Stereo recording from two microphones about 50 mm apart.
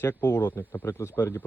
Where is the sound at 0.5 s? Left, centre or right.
Left.